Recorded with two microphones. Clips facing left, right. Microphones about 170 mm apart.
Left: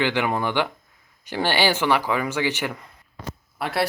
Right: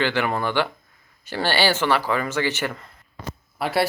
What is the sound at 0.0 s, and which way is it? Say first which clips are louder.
Speech: even; 15° left (ahead or behind).